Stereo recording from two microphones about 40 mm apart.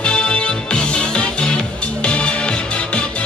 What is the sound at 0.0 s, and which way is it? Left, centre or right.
Music, left.